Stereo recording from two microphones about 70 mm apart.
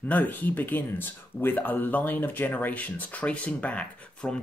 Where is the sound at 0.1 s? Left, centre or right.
Left.